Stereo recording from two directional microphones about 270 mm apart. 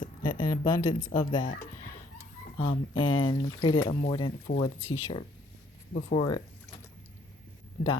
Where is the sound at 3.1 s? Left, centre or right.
Centre.